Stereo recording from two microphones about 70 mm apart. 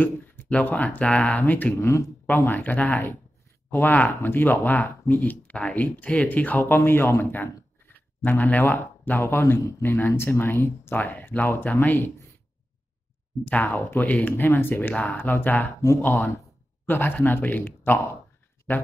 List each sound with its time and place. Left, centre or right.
0.5 s speech: left
13.5 s speech: left